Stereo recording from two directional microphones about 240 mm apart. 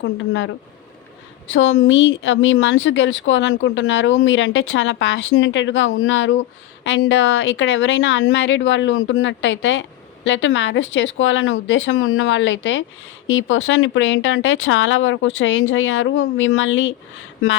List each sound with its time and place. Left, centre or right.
0.0 s speech: left